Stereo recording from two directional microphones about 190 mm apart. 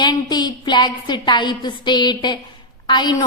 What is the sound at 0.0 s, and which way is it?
A woman's voice, 20° left (ahead or behind).